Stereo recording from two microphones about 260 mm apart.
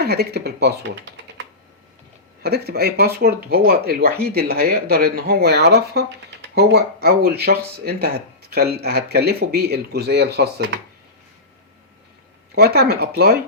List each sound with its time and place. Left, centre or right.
0.0 s speech: right
12.5 s speech: right